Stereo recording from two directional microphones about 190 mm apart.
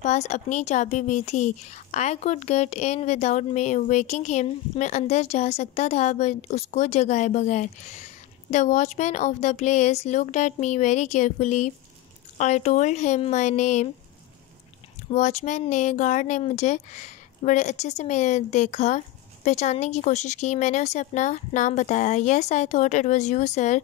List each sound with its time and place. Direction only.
0.0 s a woman's voice: 40° left (ahead or behind)
15.0 s a woman's voice: 40° left (ahead or behind)